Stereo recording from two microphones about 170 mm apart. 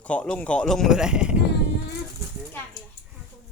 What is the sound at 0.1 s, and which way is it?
Speech, 5° left (ahead or behind).